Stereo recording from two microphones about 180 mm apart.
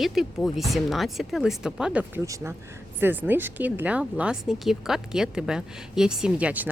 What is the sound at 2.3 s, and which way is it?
A woman's voice, 15° right (ahead or behind).